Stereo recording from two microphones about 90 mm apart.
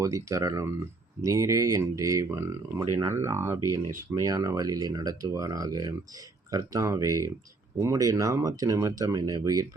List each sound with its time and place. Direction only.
0.0 s speech: 35° right (ahead or behind)